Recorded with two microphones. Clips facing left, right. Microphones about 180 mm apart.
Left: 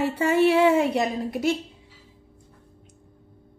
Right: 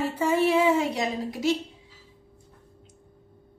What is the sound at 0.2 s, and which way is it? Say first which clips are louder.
A woman's voice: left 3 dB; 75° left (ahead or behind).